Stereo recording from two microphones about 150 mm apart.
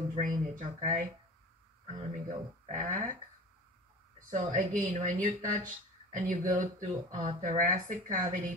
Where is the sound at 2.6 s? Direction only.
60° right (ahead or behind).